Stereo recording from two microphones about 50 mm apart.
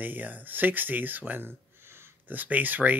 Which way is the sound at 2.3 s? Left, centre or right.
Right.